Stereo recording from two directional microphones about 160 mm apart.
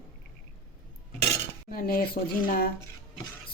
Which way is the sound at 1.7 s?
65° left (ahead or behind).